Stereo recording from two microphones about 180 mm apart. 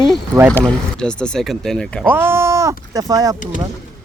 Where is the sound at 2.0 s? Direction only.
10° right (ahead or behind).